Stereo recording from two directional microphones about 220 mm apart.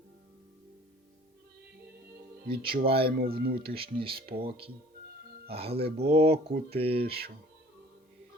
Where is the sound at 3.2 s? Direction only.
45° right (ahead or behind).